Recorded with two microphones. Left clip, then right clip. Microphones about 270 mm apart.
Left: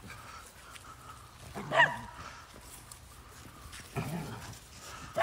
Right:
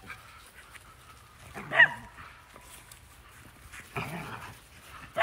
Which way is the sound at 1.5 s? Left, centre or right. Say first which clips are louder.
Right 4 dB; left.